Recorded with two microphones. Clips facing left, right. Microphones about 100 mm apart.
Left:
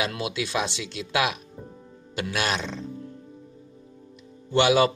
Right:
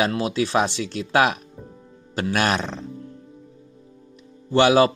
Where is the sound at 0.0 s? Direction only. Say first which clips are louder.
Right 6 dB; 40° right (ahead or behind).